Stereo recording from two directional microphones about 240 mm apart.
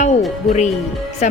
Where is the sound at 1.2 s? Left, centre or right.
Left.